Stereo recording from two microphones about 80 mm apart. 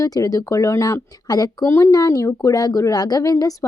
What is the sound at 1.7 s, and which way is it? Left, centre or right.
A woman's voice, left.